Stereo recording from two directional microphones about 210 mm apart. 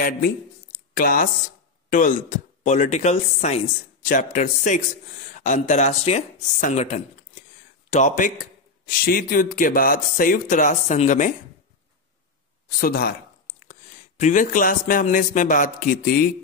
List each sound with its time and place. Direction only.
0.9 s a man's voice: 40° left (ahead or behind)
12.8 s speech: 45° left (ahead or behind)